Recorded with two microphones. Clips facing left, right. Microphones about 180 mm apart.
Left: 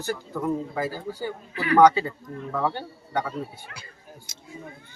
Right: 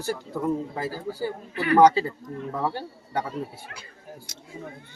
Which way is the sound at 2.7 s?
30° right (ahead or behind).